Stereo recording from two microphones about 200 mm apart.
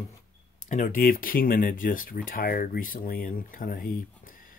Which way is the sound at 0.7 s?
40° left (ahead or behind).